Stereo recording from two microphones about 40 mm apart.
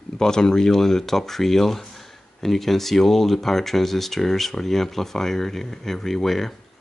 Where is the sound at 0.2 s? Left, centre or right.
Centre.